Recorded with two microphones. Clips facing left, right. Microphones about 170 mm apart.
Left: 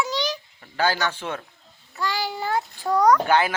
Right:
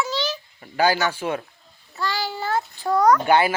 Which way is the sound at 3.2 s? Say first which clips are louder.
Right 2 dB; 10° right (ahead or behind).